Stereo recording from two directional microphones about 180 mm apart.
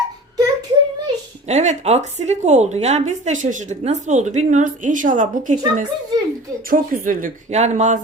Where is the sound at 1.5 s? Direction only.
40° right (ahead or behind).